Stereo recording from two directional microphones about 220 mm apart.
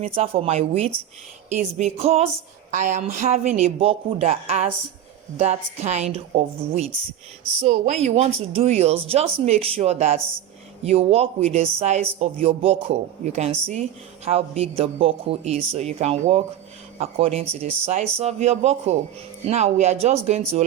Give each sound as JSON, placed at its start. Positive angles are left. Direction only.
{"t": 0.0, "sound": "speech", "side_deg": -25}